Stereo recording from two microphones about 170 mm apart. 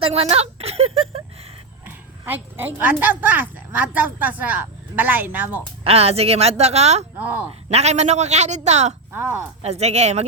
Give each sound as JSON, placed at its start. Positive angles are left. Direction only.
{"t": 0.0, "sound": "speech", "side_deg": -35}
{"t": 2.2, "sound": "speech", "side_deg": -10}
{"t": 5.8, "sound": "a man's voice", "side_deg": -35}
{"t": 7.2, "sound": "speech", "side_deg": -10}
{"t": 7.7, "sound": "a man's voice", "side_deg": -40}
{"t": 9.1, "sound": "speech", "side_deg": -10}
{"t": 9.6, "sound": "a man's voice", "side_deg": -40}